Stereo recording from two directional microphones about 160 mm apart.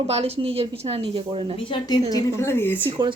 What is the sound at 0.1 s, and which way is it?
Speech, 40° right (ahead or behind).